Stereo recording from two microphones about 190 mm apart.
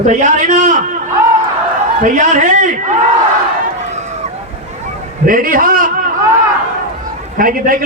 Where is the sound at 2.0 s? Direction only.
40° right (ahead or behind).